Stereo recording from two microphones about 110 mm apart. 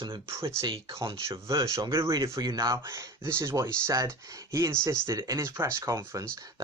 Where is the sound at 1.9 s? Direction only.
25° right (ahead or behind).